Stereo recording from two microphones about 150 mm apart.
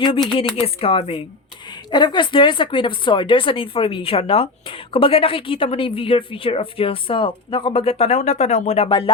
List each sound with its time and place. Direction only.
0.3 s speech: 35° left (ahead or behind)